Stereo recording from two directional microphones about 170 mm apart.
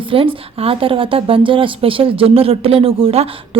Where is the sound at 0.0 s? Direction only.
30° right (ahead or behind).